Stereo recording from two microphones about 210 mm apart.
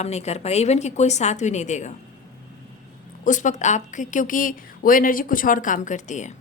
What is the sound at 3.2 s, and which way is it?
A woman's voice, 35° left (ahead or behind).